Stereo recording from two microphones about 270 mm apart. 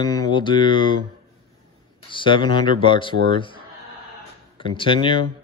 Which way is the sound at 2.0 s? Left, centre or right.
Centre.